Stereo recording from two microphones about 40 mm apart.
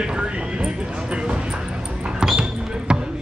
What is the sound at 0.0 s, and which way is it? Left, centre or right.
Horse, right.